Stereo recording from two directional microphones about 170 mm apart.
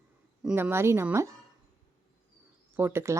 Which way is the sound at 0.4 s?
15° right (ahead or behind).